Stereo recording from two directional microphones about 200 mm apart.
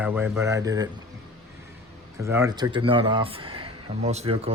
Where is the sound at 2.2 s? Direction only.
15° right (ahead or behind).